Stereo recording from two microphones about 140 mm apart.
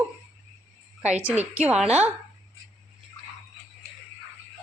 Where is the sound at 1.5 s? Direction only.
10° right (ahead or behind).